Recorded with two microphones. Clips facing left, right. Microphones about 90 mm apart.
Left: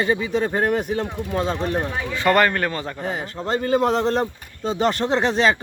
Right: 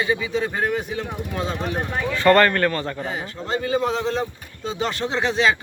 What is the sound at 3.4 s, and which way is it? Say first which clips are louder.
A man's voice: left 3 dB; 50° left (ahead or behind).